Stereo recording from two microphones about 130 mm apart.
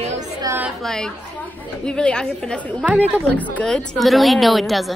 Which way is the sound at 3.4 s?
10° left (ahead or behind).